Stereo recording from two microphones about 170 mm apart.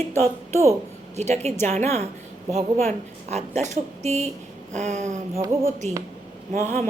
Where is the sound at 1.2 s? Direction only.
40° right (ahead or behind).